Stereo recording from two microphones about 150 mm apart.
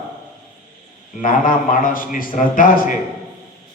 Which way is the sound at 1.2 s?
65° left (ahead or behind).